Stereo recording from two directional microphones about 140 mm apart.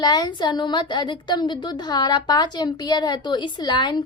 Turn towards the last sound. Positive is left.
turn(degrees=30)  # may be behind; listen again after turning